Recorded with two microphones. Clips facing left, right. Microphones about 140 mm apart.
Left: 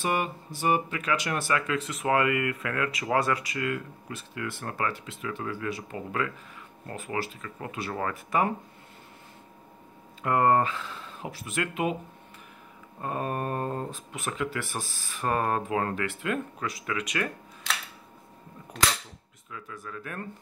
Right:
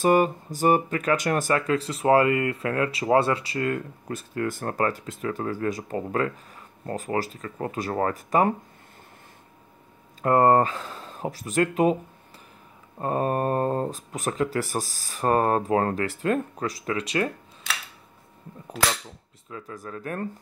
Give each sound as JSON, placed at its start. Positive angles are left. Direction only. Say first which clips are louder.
{"t": 0.0, "sound": "speech", "louder": "right 9 dB", "side_deg": -40}
{"t": 10.2, "sound": "speech", "louder": "right 4 dB", "side_deg": -40}
{"t": 13.0, "sound": "speech", "louder": "right 6 dB", "side_deg": -35}
{"t": 19.5, "sound": "speech", "louder": "right 4 dB", "side_deg": -40}